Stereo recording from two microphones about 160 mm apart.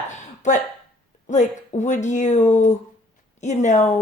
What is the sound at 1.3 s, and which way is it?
Speech, 50° left (ahead or behind).